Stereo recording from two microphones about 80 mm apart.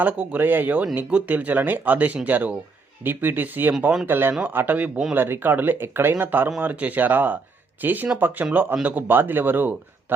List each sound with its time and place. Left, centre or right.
0.0 s speech: centre